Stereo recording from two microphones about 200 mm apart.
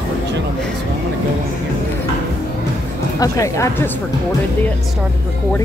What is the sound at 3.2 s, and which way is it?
Speech, 15° left (ahead or behind).